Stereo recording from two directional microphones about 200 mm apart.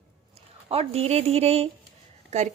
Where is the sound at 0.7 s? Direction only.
30° right (ahead or behind).